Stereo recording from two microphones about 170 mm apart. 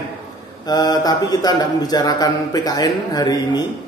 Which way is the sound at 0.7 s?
25° left (ahead or behind).